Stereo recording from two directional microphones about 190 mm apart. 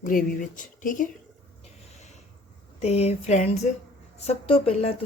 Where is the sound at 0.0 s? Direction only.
45° left (ahead or behind).